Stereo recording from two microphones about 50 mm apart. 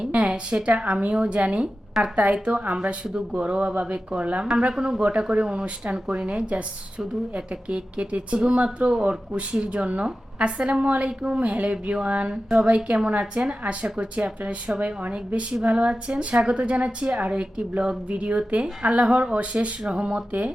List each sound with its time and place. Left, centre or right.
0.1 s speech: right